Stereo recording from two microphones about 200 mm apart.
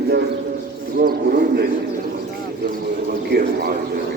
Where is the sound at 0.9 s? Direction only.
50° right (ahead or behind).